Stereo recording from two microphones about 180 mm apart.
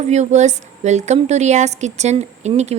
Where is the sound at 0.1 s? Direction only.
40° right (ahead or behind).